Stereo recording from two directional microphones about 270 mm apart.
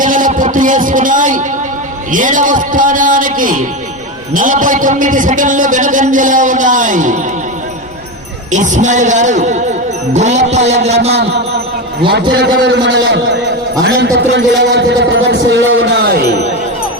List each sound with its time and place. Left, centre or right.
0.0 s a sound: right
2.1 s a man's voice: right
8.5 s a man's voice: right
12.5 s a man's voice: right